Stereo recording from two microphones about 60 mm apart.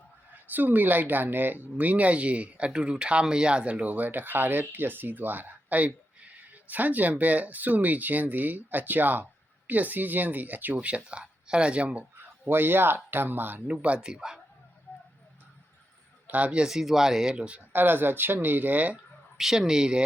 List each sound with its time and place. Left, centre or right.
0.5 s speech: right
12.5 s speech: right
13.7 s a man's voice: right
16.2 s a man's voice: right
17.7 s speech: right
19.4 s a man's voice: centre